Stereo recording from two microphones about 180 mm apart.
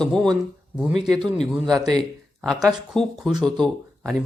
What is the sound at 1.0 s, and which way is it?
Speech, 20° right (ahead or behind).